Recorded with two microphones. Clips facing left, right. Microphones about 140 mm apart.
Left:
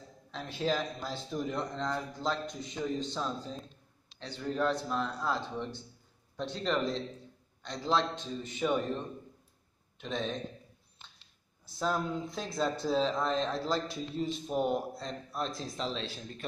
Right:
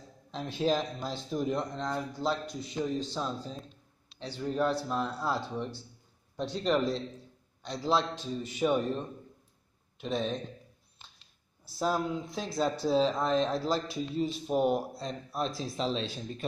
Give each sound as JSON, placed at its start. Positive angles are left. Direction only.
{"t": 0.3, "sound": "speech", "side_deg": -15}
{"t": 9.9, "sound": "speech", "side_deg": -10}
{"t": 11.8, "sound": "speech", "side_deg": -5}
{"t": 15.7, "sound": "speech", "side_deg": -20}